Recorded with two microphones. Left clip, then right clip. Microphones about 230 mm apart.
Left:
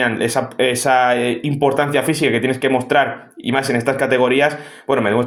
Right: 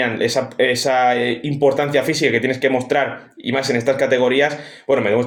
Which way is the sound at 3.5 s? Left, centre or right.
Left.